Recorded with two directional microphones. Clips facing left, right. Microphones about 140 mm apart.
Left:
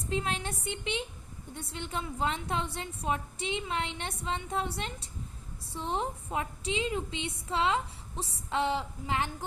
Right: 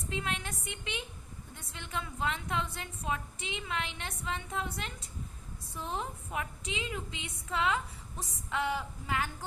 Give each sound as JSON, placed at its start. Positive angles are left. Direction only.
{"t": 0.1, "sound": "a woman's voice", "side_deg": 30}